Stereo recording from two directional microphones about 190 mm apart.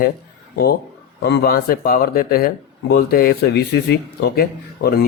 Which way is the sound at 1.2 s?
60° left (ahead or behind).